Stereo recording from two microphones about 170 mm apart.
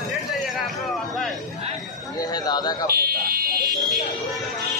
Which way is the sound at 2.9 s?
60° right (ahead or behind).